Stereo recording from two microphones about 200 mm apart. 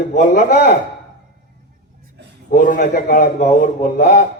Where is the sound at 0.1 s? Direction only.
35° left (ahead or behind).